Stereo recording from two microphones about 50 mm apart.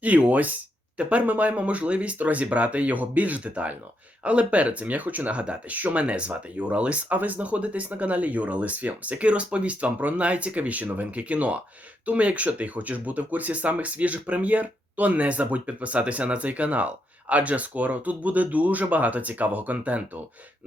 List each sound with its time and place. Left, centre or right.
0.0 s speech: right